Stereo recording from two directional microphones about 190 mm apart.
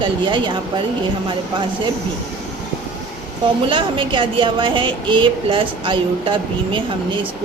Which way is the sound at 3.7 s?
25° right (ahead or behind).